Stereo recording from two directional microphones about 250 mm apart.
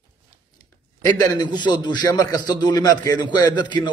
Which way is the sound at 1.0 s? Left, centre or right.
Centre.